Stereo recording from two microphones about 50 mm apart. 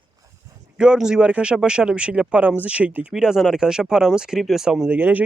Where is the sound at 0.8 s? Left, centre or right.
Centre.